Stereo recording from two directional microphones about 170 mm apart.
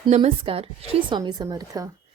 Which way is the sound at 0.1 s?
35° right (ahead or behind).